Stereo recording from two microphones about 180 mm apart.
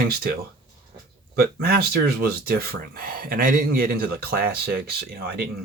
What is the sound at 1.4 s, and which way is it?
Speech, 60° right (ahead or behind).